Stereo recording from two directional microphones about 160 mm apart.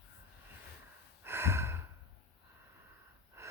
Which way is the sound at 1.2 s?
15° right (ahead or behind).